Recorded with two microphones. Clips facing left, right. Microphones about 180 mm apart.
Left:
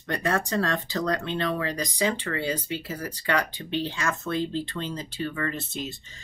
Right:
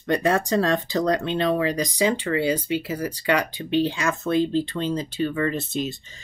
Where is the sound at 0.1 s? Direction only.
15° right (ahead or behind).